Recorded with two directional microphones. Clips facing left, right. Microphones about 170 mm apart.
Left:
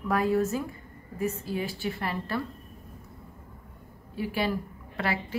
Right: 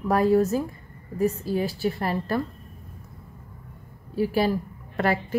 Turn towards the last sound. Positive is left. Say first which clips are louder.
# right 6 dB
turn(degrees=-45)  # may be behind; listen again after turning